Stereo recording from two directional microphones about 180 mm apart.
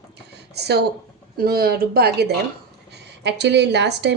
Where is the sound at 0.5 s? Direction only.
65° right (ahead or behind).